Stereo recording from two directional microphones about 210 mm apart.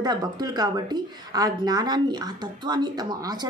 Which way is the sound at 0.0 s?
20° right (ahead or behind).